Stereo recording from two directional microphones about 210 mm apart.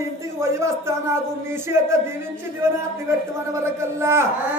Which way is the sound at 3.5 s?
10° right (ahead or behind).